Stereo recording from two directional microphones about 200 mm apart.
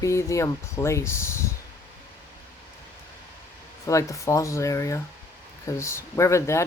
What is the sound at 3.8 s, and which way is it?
Speech, 15° left (ahead or behind).